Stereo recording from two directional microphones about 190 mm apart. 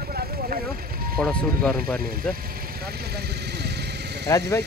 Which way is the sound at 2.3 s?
50° right (ahead or behind).